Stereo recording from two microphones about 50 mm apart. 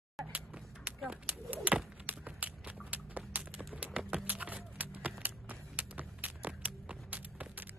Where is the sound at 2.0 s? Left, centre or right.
Right.